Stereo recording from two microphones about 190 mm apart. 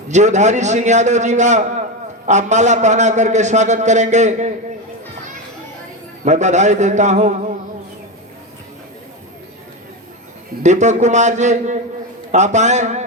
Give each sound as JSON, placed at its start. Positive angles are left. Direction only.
{"t": 0.1, "sound": "a man's voice", "side_deg": -40}
{"t": 6.2, "sound": "a man's voice", "side_deg": -40}
{"t": 10.6, "sound": "a man's voice", "side_deg": -40}